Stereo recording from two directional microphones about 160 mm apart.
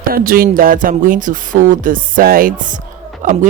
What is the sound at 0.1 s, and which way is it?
Speech, 65° right (ahead or behind).